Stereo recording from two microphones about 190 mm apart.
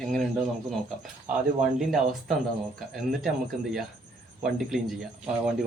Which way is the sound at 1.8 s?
Centre (ahead or behind).